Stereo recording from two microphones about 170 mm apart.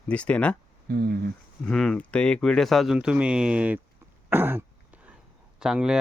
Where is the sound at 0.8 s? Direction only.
65° right (ahead or behind).